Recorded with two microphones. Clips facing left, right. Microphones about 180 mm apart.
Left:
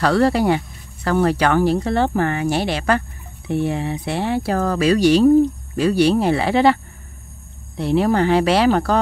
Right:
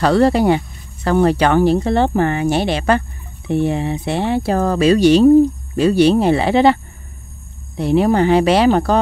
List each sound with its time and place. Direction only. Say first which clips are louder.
0.0 s speech: right 3 dB; 20° right (ahead or behind)